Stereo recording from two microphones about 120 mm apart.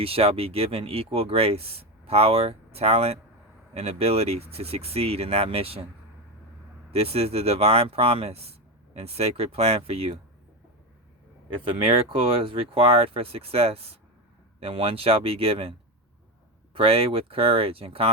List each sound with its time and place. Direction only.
0.0 s speech: 55° right (ahead or behind)
6.9 s speech: 55° right (ahead or behind)
11.6 s speech: 50° right (ahead or behind)
16.7 s speech: 55° right (ahead or behind)